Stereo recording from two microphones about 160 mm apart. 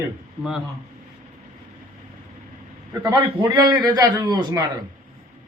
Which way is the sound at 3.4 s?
25° right (ahead or behind).